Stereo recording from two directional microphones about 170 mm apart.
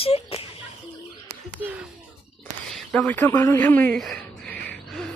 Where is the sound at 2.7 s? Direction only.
5° left (ahead or behind).